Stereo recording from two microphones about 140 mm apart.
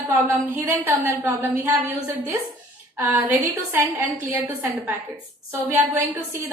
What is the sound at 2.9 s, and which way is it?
A woman's voice, 20° right (ahead or behind).